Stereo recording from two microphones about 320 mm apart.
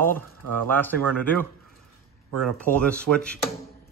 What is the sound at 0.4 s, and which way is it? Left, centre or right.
Speech, right.